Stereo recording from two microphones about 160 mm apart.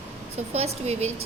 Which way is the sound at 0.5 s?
40° right (ahead or behind).